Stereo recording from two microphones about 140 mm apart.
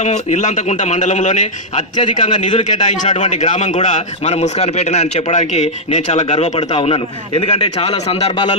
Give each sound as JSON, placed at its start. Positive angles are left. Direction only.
{"t": 0.0, "sound": "a man's voice", "side_deg": 55}